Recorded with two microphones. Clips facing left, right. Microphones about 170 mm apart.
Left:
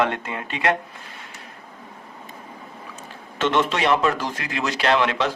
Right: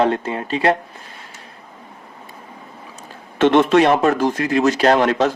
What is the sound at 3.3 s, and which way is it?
Speech, 55° right (ahead or behind).